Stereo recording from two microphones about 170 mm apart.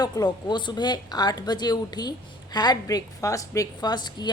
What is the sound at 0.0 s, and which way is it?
A woman's voice, 25° left (ahead or behind).